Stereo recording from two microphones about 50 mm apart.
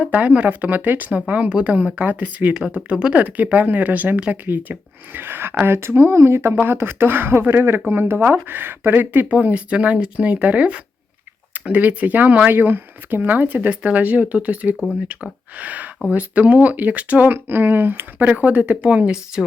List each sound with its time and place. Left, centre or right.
0.0 s speech: right
2.5 s speech: centre; by 9.4 s right
9.4 s speech: right